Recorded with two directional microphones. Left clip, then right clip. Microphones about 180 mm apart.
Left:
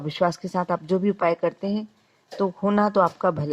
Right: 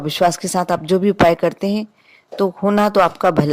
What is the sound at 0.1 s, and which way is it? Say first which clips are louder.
Speech: right 7 dB; 40° right (ahead or behind).